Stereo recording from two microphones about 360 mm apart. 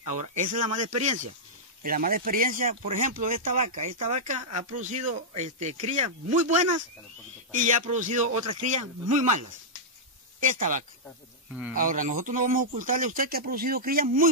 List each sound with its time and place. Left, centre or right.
0.3 s a man's voice: right
3.6 s speech: right
4.1 s a man's voice: centre
10.4 s a man's voice: right